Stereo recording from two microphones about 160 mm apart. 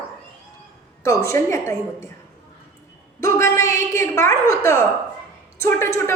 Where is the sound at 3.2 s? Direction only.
15° left (ahead or behind).